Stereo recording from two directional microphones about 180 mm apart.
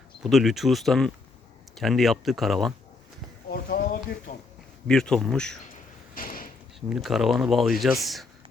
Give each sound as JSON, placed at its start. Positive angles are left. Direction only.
{"t": 0.2, "sound": "speech", "side_deg": 0}
{"t": 3.5, "sound": "a sound", "side_deg": 50}
{"t": 4.3, "sound": "speech", "side_deg": 50}
{"t": 4.9, "sound": "speech", "side_deg": 5}
{"t": 6.1, "sound": "a sound", "side_deg": 50}
{"t": 6.7, "sound": "speech", "side_deg": 0}